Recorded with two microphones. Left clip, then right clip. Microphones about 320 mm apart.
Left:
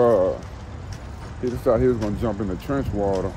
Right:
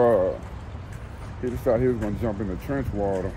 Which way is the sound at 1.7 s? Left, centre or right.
Centre.